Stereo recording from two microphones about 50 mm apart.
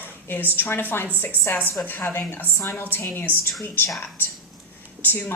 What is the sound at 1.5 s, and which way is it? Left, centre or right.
Speech, left.